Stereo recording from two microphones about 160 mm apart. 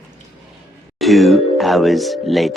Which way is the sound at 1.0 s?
Centre (ahead or behind).